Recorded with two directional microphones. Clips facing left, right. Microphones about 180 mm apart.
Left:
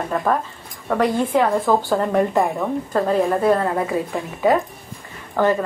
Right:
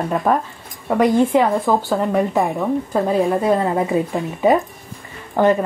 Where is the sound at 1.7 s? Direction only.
Centre (ahead or behind).